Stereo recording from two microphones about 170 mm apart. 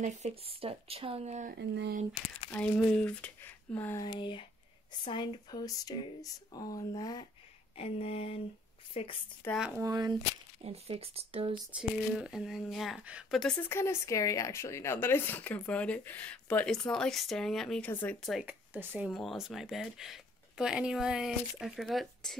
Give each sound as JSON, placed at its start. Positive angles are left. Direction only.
{"t": 0.0, "sound": "speech", "side_deg": -40}
{"t": 1.5, "sound": "speech", "side_deg": -80}
{"t": 2.5, "sound": "speech", "side_deg": 5}
{"t": 4.0, "sound": "speech", "side_deg": 30}
{"t": 7.7, "sound": "a sound", "side_deg": 35}
{"t": 9.5, "sound": "speech", "side_deg": -5}
{"t": 9.8, "sound": "speech", "side_deg": -20}
{"t": 10.6, "sound": "speech", "side_deg": -35}
{"t": 11.7, "sound": "speech", "side_deg": -5}
{"t": 18.4, "sound": "speech", "side_deg": -10}
{"t": 19.0, "sound": "speech", "side_deg": 0}